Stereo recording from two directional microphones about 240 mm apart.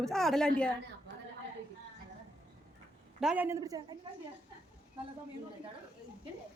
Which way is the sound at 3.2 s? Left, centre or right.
Centre.